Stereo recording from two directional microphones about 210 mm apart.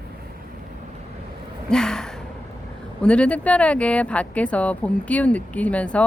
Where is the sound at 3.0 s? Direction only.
5° left (ahead or behind).